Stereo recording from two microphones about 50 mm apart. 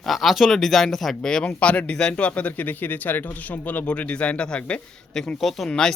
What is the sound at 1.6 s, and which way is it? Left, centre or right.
Speech, left.